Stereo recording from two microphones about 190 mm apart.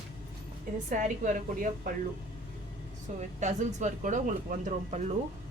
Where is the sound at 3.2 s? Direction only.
40° right (ahead or behind).